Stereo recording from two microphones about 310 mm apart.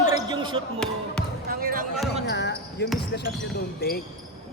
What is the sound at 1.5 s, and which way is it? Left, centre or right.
Basketball bounce, right.